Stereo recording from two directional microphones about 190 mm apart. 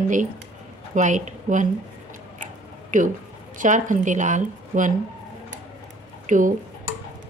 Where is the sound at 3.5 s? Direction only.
40° right (ahead or behind).